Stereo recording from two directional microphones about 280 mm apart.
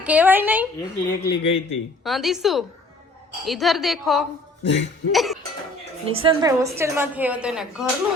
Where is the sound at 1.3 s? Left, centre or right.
Centre.